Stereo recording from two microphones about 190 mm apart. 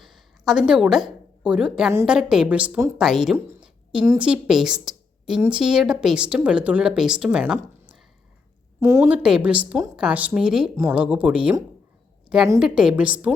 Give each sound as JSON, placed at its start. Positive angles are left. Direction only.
{"t": 0.0, "sound": "a sound", "side_deg": 0}
{"t": 1.9, "sound": "a woman's voice", "side_deg": -10}
{"t": 3.3, "sound": "a sound", "side_deg": -10}
{"t": 4.0, "sound": "speech", "side_deg": -15}
{"t": 4.3, "sound": "a woman's voice", "side_deg": -5}
{"t": 12.5, "sound": "a woman's voice", "side_deg": -5}